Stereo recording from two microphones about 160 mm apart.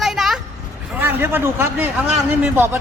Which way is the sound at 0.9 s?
10° right (ahead or behind).